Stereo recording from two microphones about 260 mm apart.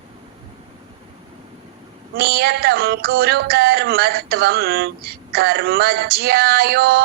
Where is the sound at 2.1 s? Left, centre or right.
Right.